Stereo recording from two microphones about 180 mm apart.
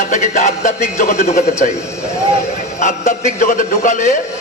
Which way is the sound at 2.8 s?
45° left (ahead or behind).